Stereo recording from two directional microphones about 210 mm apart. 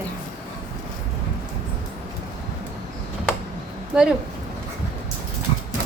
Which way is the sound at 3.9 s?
5° right (ahead or behind).